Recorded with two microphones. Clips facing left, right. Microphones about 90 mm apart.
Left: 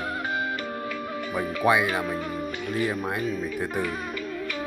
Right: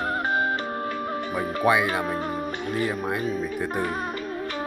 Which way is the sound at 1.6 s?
Centre (ahead or behind).